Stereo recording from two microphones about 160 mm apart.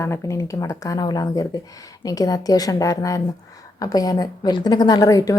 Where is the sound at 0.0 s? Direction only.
20° left (ahead or behind).